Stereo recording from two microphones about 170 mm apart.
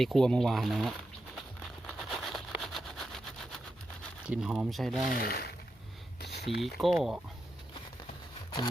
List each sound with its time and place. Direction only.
0.0 s speech: centre (ahead or behind)
2.0 s a sound: centre (ahead or behind)
4.3 s speech: 5° right (ahead or behind)
5.1 s speech: 65° left (ahead or behind)
6.6 s speech: centre (ahead or behind)